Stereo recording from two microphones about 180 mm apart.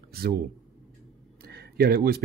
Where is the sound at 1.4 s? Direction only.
60° right (ahead or behind).